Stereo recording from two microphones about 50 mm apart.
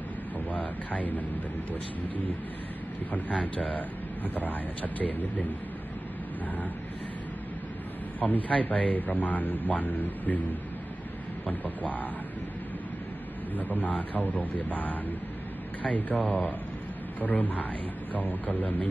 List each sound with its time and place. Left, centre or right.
0.5 s speech: left
8.2 s speech: left
11.4 s speech: left
13.6 s speech: left